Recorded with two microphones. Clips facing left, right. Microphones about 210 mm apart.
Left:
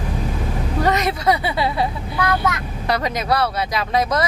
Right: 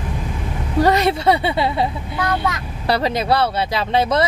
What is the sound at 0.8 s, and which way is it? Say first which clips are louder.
Speech: right 3 dB; 30° right (ahead or behind).